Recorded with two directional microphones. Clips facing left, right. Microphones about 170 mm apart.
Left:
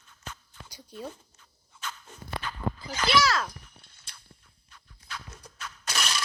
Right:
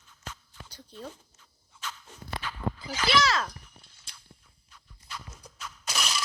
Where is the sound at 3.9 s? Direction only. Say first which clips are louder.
Even; 60° left (ahead or behind).